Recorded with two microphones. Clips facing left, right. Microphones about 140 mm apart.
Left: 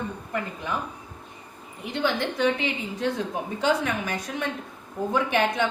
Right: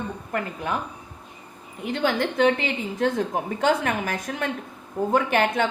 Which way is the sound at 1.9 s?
50° right (ahead or behind).